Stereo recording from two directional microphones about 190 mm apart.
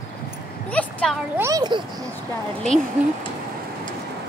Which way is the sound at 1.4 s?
20° right (ahead or behind).